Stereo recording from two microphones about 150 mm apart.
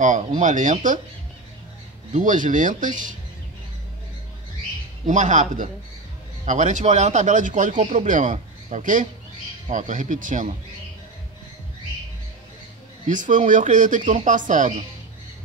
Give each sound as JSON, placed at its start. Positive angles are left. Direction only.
{"t": 0.0, "sound": "speech", "side_deg": -55}
{"t": 2.1, "sound": "speech", "side_deg": -60}
{"t": 5.0, "sound": "speech", "side_deg": -55}
{"t": 13.1, "sound": "speech", "side_deg": -60}